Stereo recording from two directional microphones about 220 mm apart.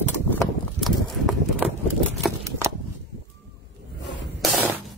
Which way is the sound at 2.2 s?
15° right (ahead or behind).